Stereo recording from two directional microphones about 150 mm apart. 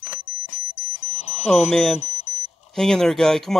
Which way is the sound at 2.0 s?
50° left (ahead or behind).